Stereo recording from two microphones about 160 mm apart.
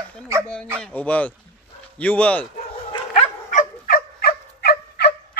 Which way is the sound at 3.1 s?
50° left (ahead or behind).